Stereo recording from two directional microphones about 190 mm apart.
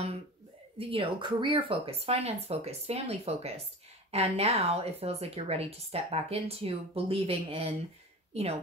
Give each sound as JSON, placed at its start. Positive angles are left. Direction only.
{"t": 0.7, "sound": "a woman's voice", "side_deg": -30}